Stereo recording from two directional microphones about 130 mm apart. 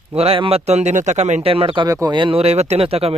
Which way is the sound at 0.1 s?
50° right (ahead or behind).